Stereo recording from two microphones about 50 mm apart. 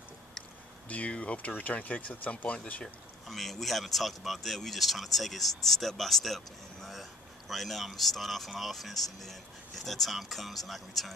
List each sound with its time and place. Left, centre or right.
0.8 s speech: left
3.3 s speech: centre